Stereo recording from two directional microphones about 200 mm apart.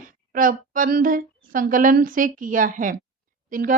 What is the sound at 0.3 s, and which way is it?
A woman's voice, 40° right (ahead or behind).